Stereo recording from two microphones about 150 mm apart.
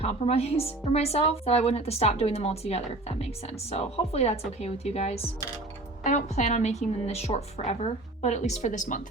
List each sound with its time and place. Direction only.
0.0 s speech: 45° left (ahead or behind)
6.0 s speech: 55° left (ahead or behind)